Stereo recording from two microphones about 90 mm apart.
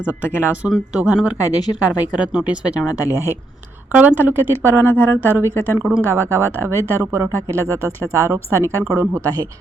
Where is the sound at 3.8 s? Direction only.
20° right (ahead or behind).